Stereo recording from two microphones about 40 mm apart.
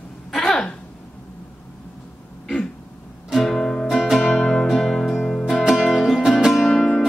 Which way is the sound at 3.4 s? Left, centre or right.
Centre.